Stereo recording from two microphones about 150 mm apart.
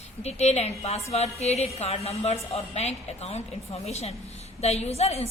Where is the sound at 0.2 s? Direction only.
45° left (ahead or behind).